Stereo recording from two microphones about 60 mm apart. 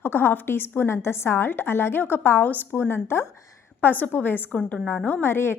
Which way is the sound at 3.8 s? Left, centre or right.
Left.